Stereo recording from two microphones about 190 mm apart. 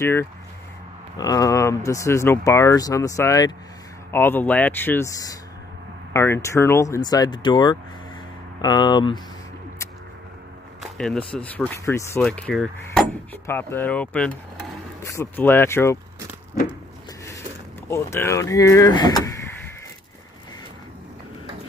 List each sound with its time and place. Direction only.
0.0 s speech: 10° left (ahead or behind)
10.8 s speech: centre (ahead or behind)
12.2 s speech: 5° left (ahead or behind)
13.5 s speech: 10° left (ahead or behind)
17.8 s speech: 15° left (ahead or behind)